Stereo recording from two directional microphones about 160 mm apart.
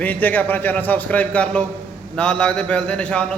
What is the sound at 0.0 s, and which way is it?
A man's voice, 10° left (ahead or behind).